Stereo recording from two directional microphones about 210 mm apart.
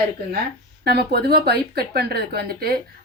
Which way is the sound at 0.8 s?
50° right (ahead or behind).